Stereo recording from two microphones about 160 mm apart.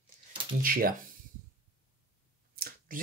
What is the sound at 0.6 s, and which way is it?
Speech, 65° right (ahead or behind).